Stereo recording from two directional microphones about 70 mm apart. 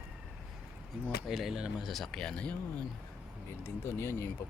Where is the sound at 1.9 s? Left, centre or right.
Centre.